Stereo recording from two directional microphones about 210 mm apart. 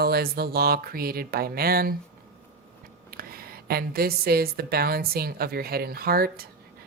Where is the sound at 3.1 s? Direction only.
45° right (ahead or behind).